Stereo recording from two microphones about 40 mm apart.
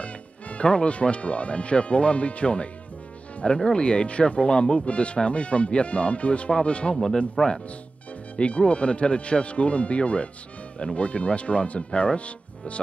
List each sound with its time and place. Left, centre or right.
0.0 s speech: left
7.2 s speech: centre
8.4 s speech: left